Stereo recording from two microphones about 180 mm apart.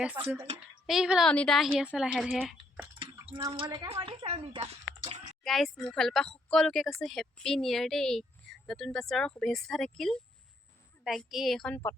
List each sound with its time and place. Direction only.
0.0 s speech: 5° right (ahead or behind)
3.0 s speech: 30° right (ahead or behind)
5.4 s speech: centre (ahead or behind)